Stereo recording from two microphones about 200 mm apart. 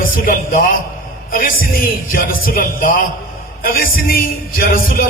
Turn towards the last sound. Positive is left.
turn(degrees=45)  # may be behind; listen again after turning